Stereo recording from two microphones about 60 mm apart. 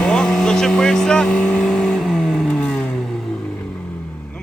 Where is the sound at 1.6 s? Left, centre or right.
Centre.